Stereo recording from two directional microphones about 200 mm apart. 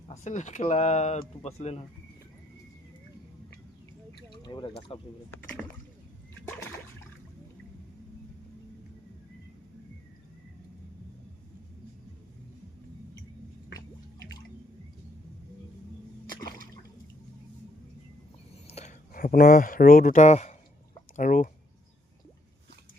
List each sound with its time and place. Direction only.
0.1 s speech: 35° left (ahead or behind)
4.3 s speech: 20° left (ahead or behind)
5.3 s speech: 10° left (ahead or behind)
6.5 s trickle: 10° left (ahead or behind)
18.7 s speech: 35° left (ahead or behind)